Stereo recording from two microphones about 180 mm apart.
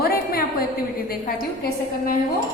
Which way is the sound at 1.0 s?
55° left (ahead or behind).